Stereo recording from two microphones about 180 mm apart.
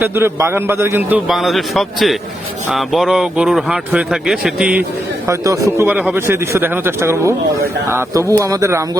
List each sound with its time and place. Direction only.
0.0 s a man's voice: 15° right (ahead or behind)